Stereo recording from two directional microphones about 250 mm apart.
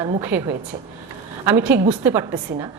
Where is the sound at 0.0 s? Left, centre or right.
Centre.